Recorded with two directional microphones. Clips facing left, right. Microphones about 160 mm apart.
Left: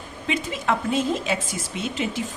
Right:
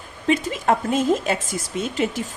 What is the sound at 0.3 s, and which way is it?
Speech, 45° right (ahead or behind).